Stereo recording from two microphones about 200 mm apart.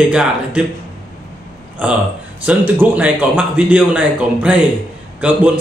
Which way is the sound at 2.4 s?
10° right (ahead or behind).